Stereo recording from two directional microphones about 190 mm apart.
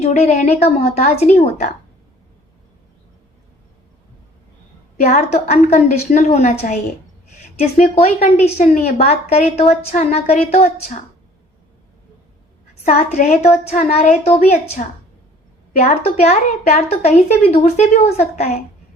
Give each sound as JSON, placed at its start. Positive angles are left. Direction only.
{"t": 0.0, "sound": "speech", "side_deg": 35}
{"t": 5.0, "sound": "speech", "side_deg": 35}
{"t": 12.8, "sound": "speech", "side_deg": 35}